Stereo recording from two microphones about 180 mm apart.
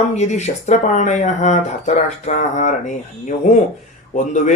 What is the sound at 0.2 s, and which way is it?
Speech, 40° left (ahead or behind).